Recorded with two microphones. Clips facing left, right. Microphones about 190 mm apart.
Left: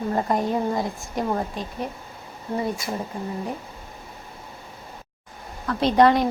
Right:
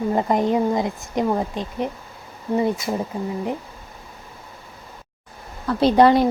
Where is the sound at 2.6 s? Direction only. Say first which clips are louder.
Right 6 dB; 20° right (ahead or behind).